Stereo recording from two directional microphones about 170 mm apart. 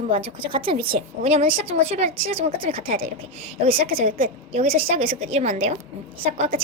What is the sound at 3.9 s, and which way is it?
Speech, 55° right (ahead or behind).